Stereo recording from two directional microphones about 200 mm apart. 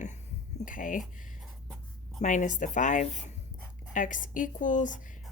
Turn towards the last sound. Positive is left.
turn(degrees=40)  # may be behind; listen again after turning